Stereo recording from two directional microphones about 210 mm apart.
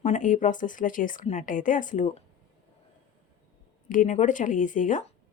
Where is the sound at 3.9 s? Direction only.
35° left (ahead or behind).